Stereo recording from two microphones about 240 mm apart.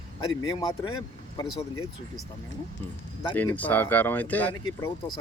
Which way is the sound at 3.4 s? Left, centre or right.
Centre.